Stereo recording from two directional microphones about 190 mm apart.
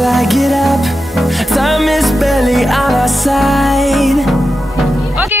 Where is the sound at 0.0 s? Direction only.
Centre (ahead or behind).